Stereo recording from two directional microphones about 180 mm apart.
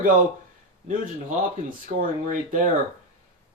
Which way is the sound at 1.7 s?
45° right (ahead or behind).